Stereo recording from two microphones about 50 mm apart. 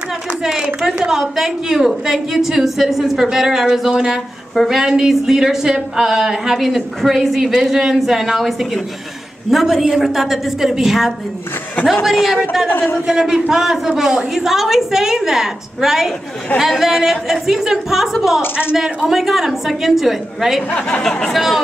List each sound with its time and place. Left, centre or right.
0.4 s a woman's voice: centre
12.6 s speech: left
13.0 s a woman's voice: centre
21.0 s speech: centre
21.3 s speech: centre